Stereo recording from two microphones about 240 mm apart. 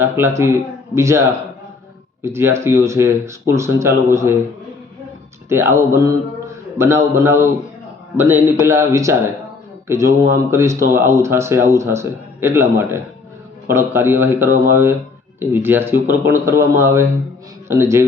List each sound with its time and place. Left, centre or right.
0.0 s speech: centre
2.2 s speech: centre
5.5 s speech: centre